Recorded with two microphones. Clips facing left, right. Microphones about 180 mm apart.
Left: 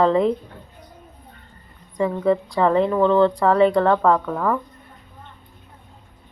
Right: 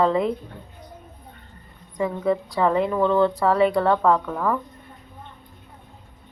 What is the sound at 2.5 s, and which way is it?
Speech, 30° left (ahead or behind).